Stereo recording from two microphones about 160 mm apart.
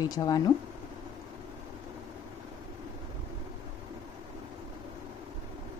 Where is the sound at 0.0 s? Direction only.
25° left (ahead or behind).